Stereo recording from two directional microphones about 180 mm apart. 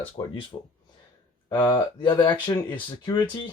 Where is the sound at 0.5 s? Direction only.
30° left (ahead or behind).